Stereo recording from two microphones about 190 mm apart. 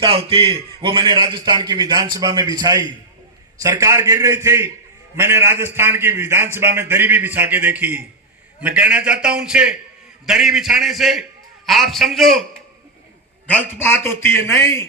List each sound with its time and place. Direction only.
0.0 s a man's voice: 25° right (ahead or behind); by 12.4 s centre (ahead or behind)
13.5 s a man's voice: 10° left (ahead or behind)